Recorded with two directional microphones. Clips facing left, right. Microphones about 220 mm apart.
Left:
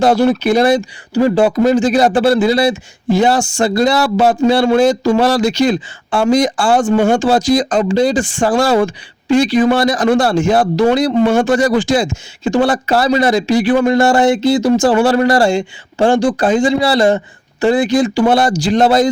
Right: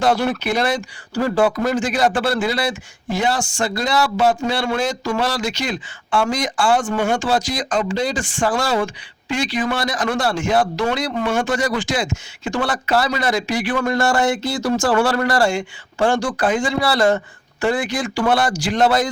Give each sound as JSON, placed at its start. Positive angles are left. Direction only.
{"t": 0.0, "sound": "speech", "side_deg": 40}
{"t": 0.6, "sound": "speech", "side_deg": 25}
{"t": 2.0, "sound": "speech", "side_deg": 35}